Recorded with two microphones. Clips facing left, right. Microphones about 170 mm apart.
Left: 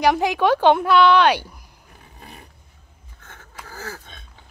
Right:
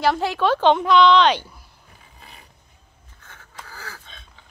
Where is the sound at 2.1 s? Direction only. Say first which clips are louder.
Left 5 dB; 50° left (ahead or behind).